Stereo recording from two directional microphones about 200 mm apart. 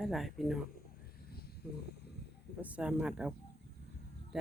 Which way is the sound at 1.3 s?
50° left (ahead or behind).